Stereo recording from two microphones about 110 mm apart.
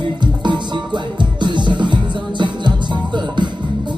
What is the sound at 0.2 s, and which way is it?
Music, 45° right (ahead or behind).